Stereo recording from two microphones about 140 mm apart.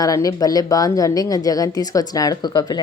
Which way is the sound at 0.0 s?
25° left (ahead or behind).